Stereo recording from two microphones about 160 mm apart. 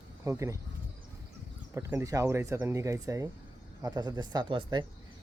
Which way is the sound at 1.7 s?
15° right (ahead or behind).